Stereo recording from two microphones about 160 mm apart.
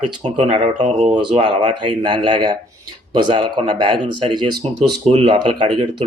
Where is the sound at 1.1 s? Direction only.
30° right (ahead or behind).